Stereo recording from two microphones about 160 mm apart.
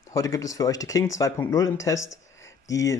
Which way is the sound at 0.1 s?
20° left (ahead or behind).